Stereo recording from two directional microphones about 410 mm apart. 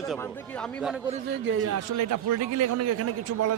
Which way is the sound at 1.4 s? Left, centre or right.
Right.